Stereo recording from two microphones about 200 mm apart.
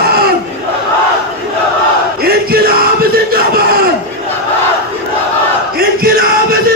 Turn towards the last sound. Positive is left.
turn(degrees=-50)  # may be behind; listen again after turning